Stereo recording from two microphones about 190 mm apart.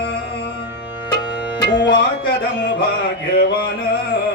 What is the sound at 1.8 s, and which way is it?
Music, 65° left (ahead or behind).